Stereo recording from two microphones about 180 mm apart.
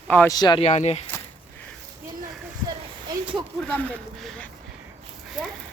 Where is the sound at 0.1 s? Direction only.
10° left (ahead or behind).